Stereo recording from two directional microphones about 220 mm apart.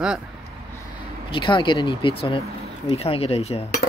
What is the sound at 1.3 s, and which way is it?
Speech, 20° left (ahead or behind).